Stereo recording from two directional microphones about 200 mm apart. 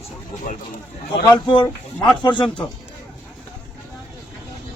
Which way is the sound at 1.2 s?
20° left (ahead or behind).